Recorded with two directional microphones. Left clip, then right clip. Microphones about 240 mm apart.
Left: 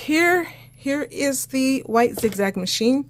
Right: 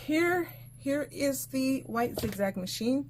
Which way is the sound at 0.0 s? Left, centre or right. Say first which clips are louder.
Left 9 dB; left.